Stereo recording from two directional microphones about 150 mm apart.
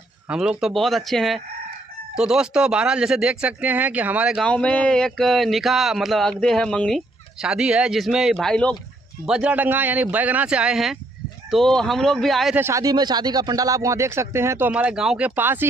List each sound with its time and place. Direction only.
0.3 s speech: 5° right (ahead or behind)
4.5 s speech: 5° left (ahead or behind)
7.4 s speech: 5° right (ahead or behind)
9.2 s speech: 5° right (ahead or behind)
12.5 s speech: 20° right (ahead or behind)